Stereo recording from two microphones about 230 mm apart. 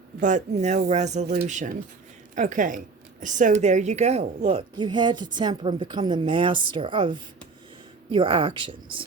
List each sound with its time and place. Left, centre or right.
0.2 s a woman's voice: right